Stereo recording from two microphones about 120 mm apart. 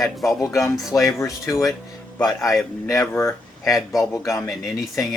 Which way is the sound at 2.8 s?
25° left (ahead or behind).